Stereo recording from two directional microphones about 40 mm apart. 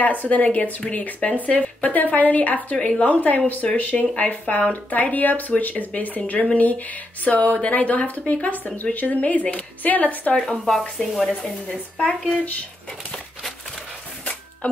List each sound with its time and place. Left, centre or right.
0.0 s a woman's voice: left
10.7 s speech: centre
11.4 s speech: centre
14.6 s a woman's voice: left